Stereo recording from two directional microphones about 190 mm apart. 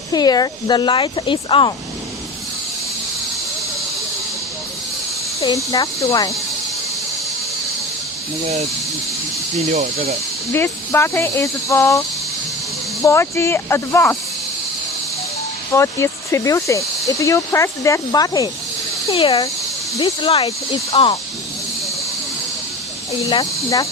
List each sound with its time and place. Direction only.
0.1 s speech: 20° left (ahead or behind)
5.4 s speech: 15° left (ahead or behind)
9.7 s speech: 40° right (ahead or behind)
10.5 s speech: 10° left (ahead or behind)
15.7 s speech: 15° left (ahead or behind)
23.3 s speech: 20° left (ahead or behind)